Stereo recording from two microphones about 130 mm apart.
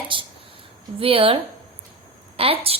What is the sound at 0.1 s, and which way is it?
A woman's voice, 40° right (ahead or behind).